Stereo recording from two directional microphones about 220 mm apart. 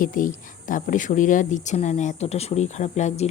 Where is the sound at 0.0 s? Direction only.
40° left (ahead or behind).